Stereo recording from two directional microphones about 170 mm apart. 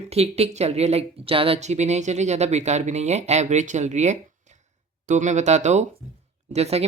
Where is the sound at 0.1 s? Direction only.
35° right (ahead or behind).